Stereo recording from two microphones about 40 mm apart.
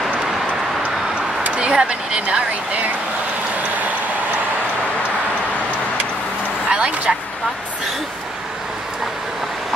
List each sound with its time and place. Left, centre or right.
1.6 s a woman's voice: right
6.7 s speech: right